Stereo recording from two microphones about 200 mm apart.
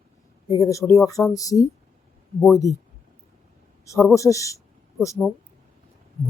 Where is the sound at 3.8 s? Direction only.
15° left (ahead or behind).